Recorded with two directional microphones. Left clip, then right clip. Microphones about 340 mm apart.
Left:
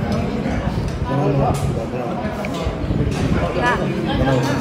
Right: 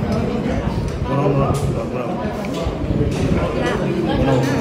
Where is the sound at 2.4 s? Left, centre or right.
Centre.